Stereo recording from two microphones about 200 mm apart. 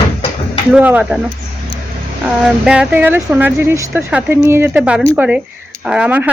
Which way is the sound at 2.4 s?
5° right (ahead or behind).